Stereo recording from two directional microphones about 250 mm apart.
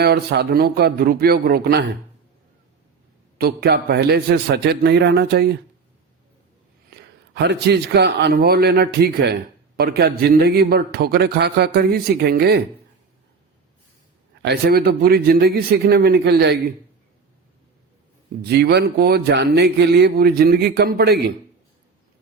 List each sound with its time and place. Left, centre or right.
0.0 s a man's voice: right
3.3 s a man's voice: right
6.9 s a man's voice: right
14.4 s a man's voice: right
18.4 s a man's voice: right